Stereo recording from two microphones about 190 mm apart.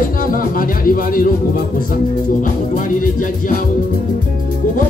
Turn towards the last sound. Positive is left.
turn(degrees=45)  # may be behind; listen again after turning